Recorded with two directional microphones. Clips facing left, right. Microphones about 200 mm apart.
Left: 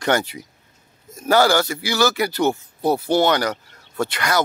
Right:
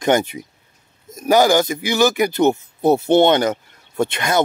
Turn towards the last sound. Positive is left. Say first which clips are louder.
# right 3 dB
turn(degrees=-20)  # may be behind; listen again after turning